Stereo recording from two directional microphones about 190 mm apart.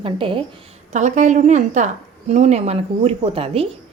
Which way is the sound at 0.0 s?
25° right (ahead or behind).